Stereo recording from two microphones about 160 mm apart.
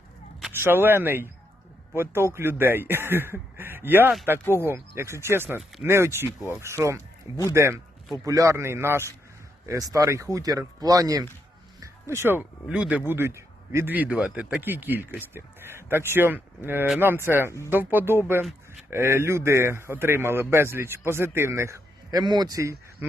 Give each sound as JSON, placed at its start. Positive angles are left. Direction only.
{"t": 0.5, "sound": "a man's voice", "side_deg": -15}